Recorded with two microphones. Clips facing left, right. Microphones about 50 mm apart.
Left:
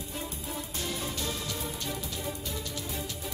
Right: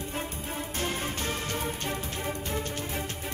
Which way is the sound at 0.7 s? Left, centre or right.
Right.